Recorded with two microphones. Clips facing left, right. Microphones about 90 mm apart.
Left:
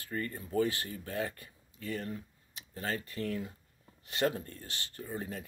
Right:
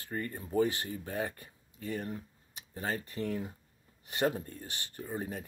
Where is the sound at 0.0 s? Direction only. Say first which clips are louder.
Even; 20° right (ahead or behind).